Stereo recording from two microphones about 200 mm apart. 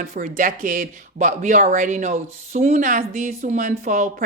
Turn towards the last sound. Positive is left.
turn(degrees=-40)  # may be behind; listen again after turning